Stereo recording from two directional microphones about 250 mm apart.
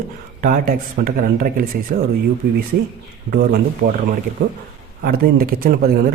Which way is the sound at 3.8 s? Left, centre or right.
Right.